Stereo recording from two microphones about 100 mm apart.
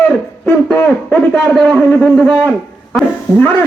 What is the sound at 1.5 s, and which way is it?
Speech, centre (ahead or behind).